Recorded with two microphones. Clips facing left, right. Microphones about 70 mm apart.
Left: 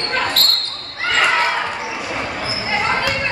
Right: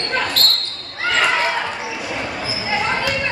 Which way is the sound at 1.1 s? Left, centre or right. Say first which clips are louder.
Left 2 dB; centre.